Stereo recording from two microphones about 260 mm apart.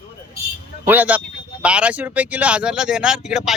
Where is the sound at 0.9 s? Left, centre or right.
Centre.